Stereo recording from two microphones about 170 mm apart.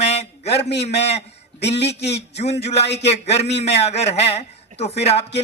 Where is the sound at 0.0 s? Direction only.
40° left (ahead or behind).